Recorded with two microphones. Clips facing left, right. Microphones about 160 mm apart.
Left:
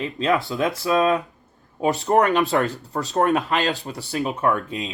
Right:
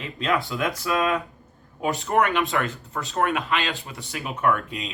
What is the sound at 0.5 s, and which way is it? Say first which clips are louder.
Speech: left 4 dB; 35° left (ahead or behind).